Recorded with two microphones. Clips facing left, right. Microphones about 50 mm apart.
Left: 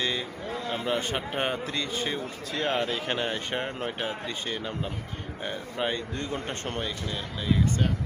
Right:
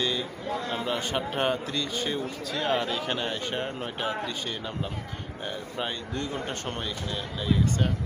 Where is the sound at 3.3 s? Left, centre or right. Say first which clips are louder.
Even; left.